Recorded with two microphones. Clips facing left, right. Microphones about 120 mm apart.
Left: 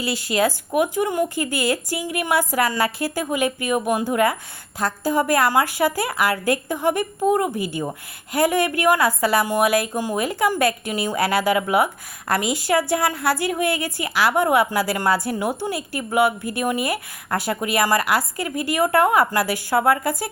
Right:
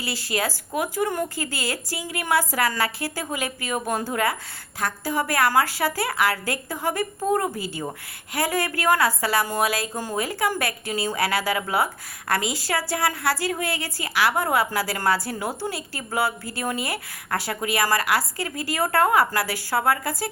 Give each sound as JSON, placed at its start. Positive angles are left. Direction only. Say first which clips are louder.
{"t": 0.0, "sound": "speech", "louder": "left 6 dB", "side_deg": 20}